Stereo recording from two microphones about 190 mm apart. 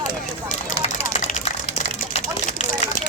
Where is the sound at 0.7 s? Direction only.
35° left (ahead or behind).